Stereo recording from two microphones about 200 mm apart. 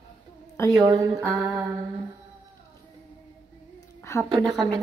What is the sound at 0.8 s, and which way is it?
Speech, 15° right (ahead or behind).